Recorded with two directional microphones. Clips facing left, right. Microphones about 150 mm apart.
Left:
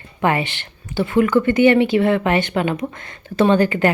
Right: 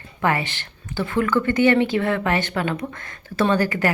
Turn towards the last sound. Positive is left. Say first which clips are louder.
# left 5 dB
turn(degrees=20)  # may be behind; listen again after turning